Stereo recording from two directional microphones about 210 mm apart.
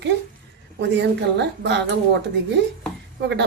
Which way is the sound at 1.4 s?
55° right (ahead or behind).